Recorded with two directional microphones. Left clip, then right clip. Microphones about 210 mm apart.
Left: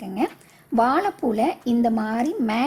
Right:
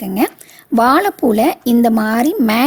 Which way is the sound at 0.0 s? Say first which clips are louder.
Right 8 dB; 40° right (ahead or behind).